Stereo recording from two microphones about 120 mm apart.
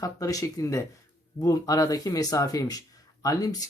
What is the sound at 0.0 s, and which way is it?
Speech, 30° left (ahead or behind).